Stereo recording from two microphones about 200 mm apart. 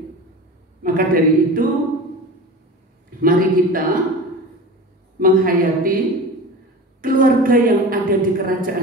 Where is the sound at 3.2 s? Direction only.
45° right (ahead or behind).